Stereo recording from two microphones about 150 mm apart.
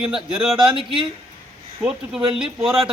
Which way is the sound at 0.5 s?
35° right (ahead or behind).